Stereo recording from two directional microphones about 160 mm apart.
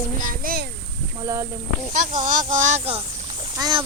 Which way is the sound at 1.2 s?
20° right (ahead or behind).